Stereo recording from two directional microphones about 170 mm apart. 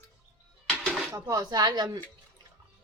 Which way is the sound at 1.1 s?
20° right (ahead or behind).